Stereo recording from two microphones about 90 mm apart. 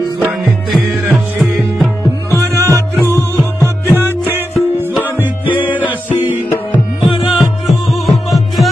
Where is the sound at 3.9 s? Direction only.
25° right (ahead or behind).